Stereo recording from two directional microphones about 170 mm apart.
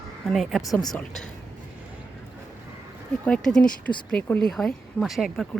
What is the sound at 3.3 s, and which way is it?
Speech, 5° left (ahead or behind).